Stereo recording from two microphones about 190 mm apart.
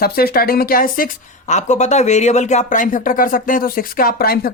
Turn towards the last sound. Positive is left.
turn(degrees=50)  # may be behind; listen again after turning